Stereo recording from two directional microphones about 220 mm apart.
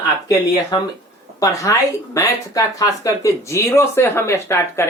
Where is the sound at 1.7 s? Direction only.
15° left (ahead or behind).